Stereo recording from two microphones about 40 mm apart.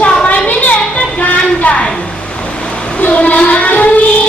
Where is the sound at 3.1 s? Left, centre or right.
Left.